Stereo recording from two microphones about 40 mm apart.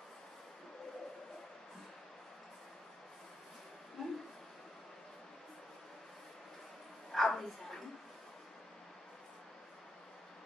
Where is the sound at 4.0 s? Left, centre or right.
Centre.